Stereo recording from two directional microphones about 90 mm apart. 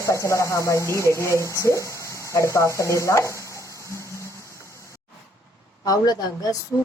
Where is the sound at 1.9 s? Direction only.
35° left (ahead or behind).